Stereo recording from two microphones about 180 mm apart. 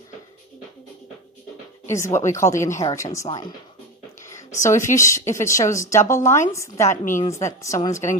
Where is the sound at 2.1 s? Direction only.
15° left (ahead or behind).